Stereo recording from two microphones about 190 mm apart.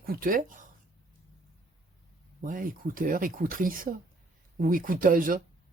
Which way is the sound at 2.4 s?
45° right (ahead or behind).